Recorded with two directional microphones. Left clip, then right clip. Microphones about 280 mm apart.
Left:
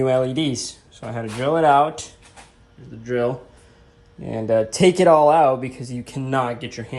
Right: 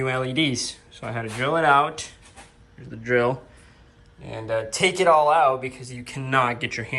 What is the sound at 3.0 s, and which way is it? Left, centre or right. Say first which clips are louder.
Speech: right 1 dB; centre.